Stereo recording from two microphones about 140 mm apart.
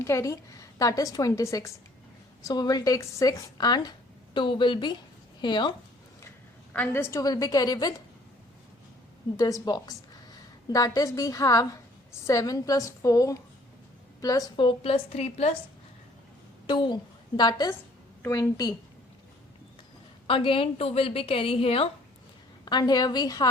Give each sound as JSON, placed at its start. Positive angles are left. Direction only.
{"t": 0.0, "sound": "a woman's voice", "side_deg": 20}
{"t": 6.7, "sound": "a woman's voice", "side_deg": 15}
{"t": 9.4, "sound": "a woman's voice", "side_deg": 30}
{"t": 16.6, "sound": "a woman's voice", "side_deg": 35}
{"t": 20.2, "sound": "a woman's voice", "side_deg": 40}
{"t": 22.6, "sound": "a woman's voice", "side_deg": 30}